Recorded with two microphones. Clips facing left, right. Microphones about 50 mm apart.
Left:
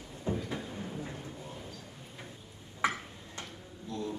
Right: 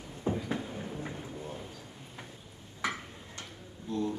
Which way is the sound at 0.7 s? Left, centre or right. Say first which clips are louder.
Right 1 dB; centre.